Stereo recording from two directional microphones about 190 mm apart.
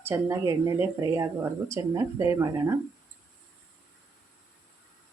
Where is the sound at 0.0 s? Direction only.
15° right (ahead or behind).